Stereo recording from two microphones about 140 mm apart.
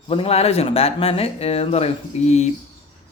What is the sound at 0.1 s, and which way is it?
Speech, 45° left (ahead or behind).